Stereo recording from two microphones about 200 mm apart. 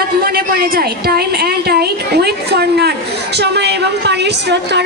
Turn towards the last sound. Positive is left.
turn(degrees=-55)  # may be behind; listen again after turning